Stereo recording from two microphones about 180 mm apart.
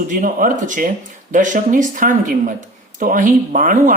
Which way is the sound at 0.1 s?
50° right (ahead or behind).